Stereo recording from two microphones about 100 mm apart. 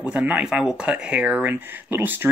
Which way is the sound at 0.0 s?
15° right (ahead or behind).